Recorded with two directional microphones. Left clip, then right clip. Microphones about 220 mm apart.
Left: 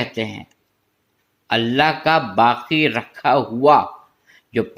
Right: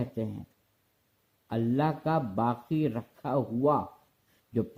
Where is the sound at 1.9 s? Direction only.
25° left (ahead or behind).